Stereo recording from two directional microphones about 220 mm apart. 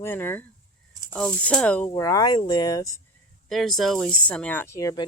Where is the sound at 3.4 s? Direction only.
Centre (ahead or behind); by 5.1 s 15° left (ahead or behind).